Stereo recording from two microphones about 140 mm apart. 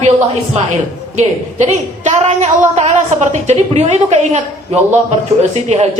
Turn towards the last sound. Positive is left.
turn(degrees=-50)  # may be behind; listen again after turning